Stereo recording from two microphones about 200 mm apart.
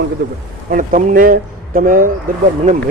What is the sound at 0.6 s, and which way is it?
A man's voice, 40° right (ahead or behind).